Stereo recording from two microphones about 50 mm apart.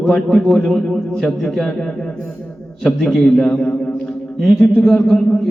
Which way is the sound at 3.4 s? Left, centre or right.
Centre.